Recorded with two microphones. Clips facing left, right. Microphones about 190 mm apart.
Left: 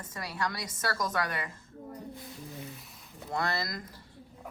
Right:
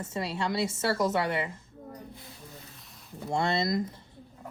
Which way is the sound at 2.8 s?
Centre (ahead or behind).